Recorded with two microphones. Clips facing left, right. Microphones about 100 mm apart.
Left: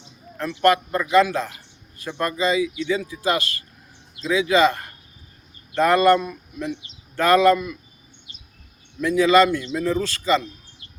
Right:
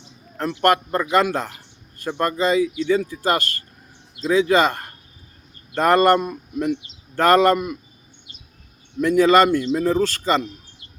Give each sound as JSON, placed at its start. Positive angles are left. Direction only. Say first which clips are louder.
{"t": 0.6, "sound": "speech", "louder": "even", "side_deg": -45}
{"t": 9.0, "sound": "speech", "louder": "right 2 dB", "side_deg": -45}